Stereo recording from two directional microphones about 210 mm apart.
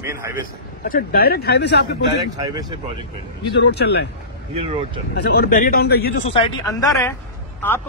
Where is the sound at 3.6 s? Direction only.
50° left (ahead or behind).